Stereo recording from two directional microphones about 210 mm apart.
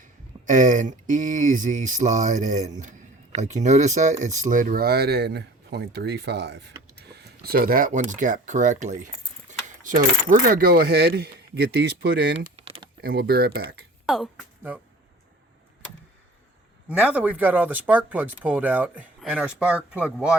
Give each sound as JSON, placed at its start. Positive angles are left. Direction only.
{"t": 0.0, "sound": "speech", "side_deg": -40}
{"t": 12.5, "sound": "typing", "side_deg": -25}
{"t": 13.0, "sound": "speech", "side_deg": -45}
{"t": 14.1, "sound": "speech", "side_deg": 0}
{"t": 17.2, "sound": "speech", "side_deg": -10}